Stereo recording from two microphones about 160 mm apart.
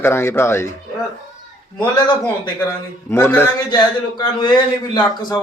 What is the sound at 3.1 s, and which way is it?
Speech, 15° left (ahead or behind).